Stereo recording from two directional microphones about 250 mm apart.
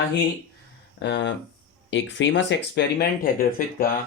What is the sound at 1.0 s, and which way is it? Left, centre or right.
Speech, left.